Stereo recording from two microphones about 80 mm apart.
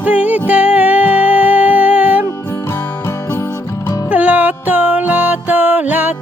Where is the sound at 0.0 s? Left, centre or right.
Centre.